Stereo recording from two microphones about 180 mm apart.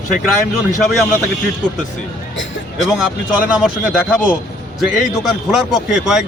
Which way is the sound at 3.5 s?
5° right (ahead or behind).